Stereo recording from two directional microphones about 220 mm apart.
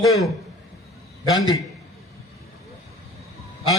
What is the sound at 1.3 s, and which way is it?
Speech, 15° left (ahead or behind).